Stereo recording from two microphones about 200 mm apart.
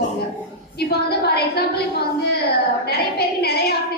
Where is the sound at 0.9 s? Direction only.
55° left (ahead or behind).